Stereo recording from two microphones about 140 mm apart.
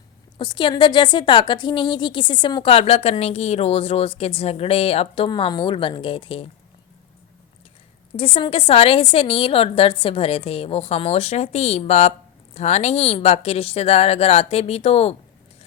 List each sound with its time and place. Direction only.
0.3 s a woman's voice: 35° left (ahead or behind)
5.3 s a woman's voice: 30° left (ahead or behind)
8.1 s a woman's voice: 40° left (ahead or behind)